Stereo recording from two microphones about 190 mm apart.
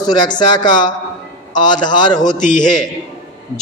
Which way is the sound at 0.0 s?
20° left (ahead or behind).